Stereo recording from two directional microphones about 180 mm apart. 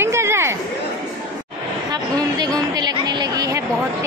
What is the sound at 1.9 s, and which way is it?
Speech, 20° right (ahead or behind).